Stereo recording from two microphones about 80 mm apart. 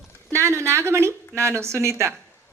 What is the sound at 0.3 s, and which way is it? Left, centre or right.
A woman's voice, right.